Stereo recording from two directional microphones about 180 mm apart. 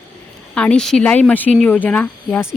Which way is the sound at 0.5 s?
5° left (ahead or behind).